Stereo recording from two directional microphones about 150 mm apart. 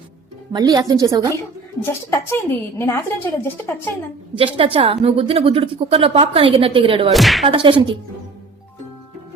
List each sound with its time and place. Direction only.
0.5 s a woman's voice: 30° right (ahead or behind)
1.8 s a woman's voice: 15° left (ahead or behind)
4.5 s a woman's voice: 40° right (ahead or behind)
7.1 s a sound: centre (ahead or behind)
7.4 s a woman's voice: 35° right (ahead or behind)